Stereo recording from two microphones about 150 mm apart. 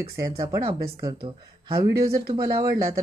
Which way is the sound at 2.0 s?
25° right (ahead or behind).